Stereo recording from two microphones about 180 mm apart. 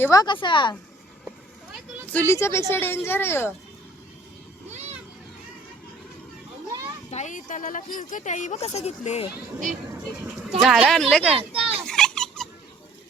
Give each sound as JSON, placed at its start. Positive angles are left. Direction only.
{"t": 0.0, "sound": "a woman's voice", "side_deg": 20}
{"t": 1.7, "sound": "a woman's voice", "side_deg": 10}
{"t": 4.7, "sound": "vehicle", "side_deg": -35}
{"t": 7.1, "sound": "speech", "side_deg": 40}
{"t": 10.6, "sound": "speech", "side_deg": 0}
{"t": 11.3, "sound": "a sound", "side_deg": -30}
{"t": 11.9, "sound": "a sound", "side_deg": 5}